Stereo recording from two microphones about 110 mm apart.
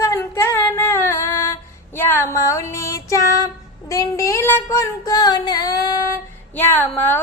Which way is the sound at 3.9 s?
30° left (ahead or behind).